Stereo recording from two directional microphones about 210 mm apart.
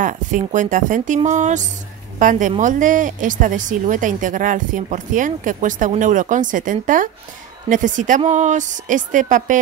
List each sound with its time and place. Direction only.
0.0 s a woman's voice: 35° right (ahead or behind)